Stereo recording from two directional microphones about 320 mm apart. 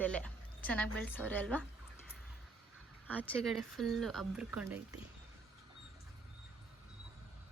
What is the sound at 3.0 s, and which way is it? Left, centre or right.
Speech, centre.